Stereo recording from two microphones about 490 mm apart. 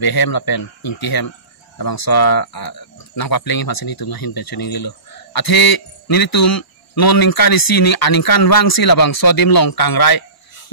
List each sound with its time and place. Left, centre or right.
0.0 s speech: left